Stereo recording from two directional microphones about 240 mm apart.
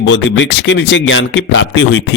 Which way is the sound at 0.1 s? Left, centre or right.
Left.